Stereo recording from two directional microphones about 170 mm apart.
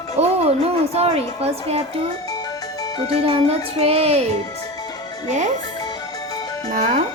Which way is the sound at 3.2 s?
35° right (ahead or behind).